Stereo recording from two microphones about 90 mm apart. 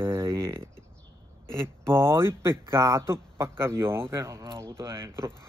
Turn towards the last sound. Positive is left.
turn(degrees=-30)  # may be behind; listen again after turning